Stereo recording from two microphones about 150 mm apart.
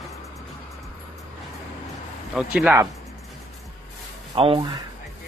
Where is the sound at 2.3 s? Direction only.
5° right (ahead or behind).